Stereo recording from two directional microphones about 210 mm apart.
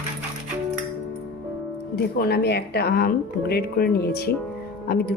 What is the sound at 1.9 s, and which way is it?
Speech, 50° left (ahead or behind).